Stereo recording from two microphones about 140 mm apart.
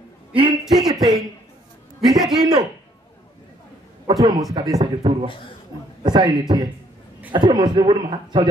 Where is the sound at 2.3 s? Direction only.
30° right (ahead or behind).